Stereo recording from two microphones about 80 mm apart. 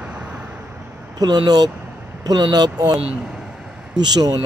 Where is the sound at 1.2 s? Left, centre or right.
Right.